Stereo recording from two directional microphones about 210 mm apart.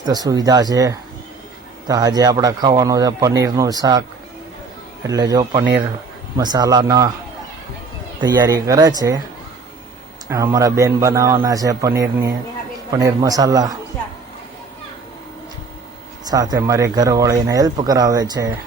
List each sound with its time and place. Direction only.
0.0 s speech: 20° right (ahead or behind)
5.0 s speech: 15° right (ahead or behind)
8.2 s speech: 20° right (ahead or behind)
10.2 s speech: 15° right (ahead or behind)
16.2 s speech: 15° right (ahead or behind)